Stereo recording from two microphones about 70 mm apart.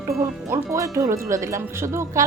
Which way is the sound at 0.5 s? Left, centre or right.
Right.